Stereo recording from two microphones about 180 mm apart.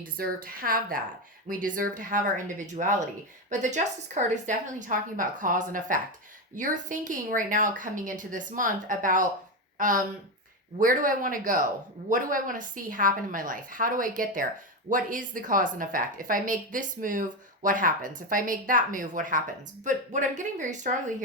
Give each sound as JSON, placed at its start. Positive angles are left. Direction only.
{"t": 0.2, "sound": "a woman's voice", "side_deg": -50}